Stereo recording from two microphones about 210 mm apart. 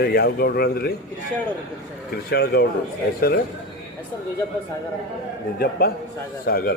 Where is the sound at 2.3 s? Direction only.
50° left (ahead or behind).